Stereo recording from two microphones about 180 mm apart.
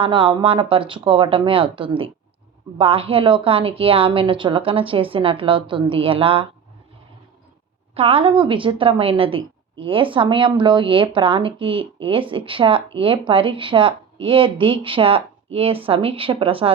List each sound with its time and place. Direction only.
0.0 s a woman's voice: 30° right (ahead or behind)
7.9 s a woman's voice: 35° right (ahead or behind)